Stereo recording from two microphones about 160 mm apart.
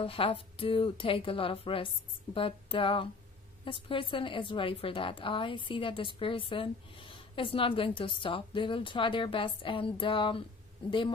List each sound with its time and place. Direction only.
0.0 s a woman's voice: 35° left (ahead or behind)